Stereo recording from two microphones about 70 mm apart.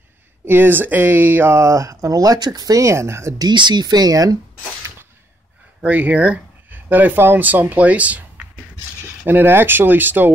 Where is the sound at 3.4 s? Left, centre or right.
Right.